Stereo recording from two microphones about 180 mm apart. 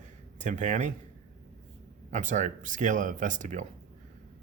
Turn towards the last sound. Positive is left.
turn(degrees=-45)  # may be behind; listen again after turning